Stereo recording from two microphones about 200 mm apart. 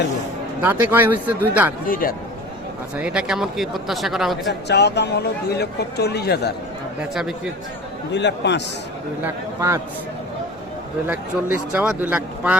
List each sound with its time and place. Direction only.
0.6 s speech: 10° right (ahead or behind)
1.9 s a man's voice: 45° left (ahead or behind)
3.0 s speech: 5° right (ahead or behind)
4.7 s speech: 55° left (ahead or behind)
7.0 s speech: 5° right (ahead or behind)
8.1 s speech: 60° left (ahead or behind)
9.2 s speech: 15° right (ahead or behind)
11.5 s speech: 5° right (ahead or behind)